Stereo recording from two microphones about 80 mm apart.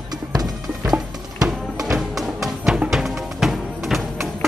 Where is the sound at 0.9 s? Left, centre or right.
Centre.